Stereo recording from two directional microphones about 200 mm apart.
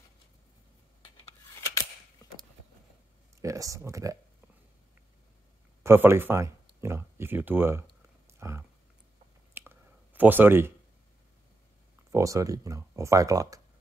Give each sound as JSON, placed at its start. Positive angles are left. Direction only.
{"t": 2.2, "sound": "a sound", "side_deg": 20}
{"t": 3.3, "sound": "speech", "side_deg": -15}
{"t": 5.9, "sound": "speech", "side_deg": -10}
{"t": 7.8, "sound": "a sound", "side_deg": -15}
{"t": 9.5, "sound": "clicking", "side_deg": -10}
{"t": 12.1, "sound": "speech", "side_deg": -15}